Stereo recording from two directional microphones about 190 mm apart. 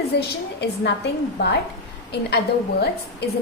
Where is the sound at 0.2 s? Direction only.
60° left (ahead or behind).